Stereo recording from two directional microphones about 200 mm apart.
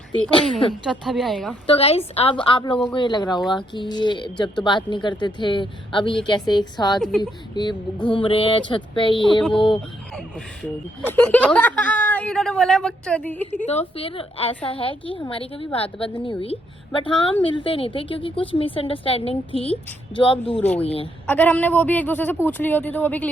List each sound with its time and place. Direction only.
0.9 s a woman's voice: centre (ahead or behind)
1.6 s speech: 30° left (ahead or behind)
10.2 s speech: 5° left (ahead or behind)
13.6 s speech: 35° left (ahead or behind)
20.5 s speech: 5° left (ahead or behind)
20.8 s speech: 30° left (ahead or behind)
21.2 s speech: 10° left (ahead or behind)